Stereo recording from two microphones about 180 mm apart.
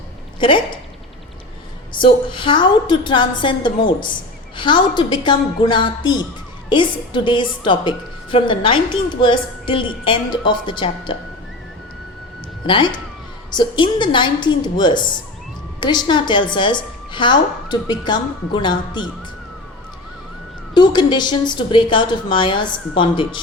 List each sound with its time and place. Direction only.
0.3 s a woman's voice: 25° left (ahead or behind)
2.0 s a woman's voice: 25° left (ahead or behind)
12.6 s a woman's voice: 25° left (ahead or behind)
20.7 s a woman's voice: 25° left (ahead or behind)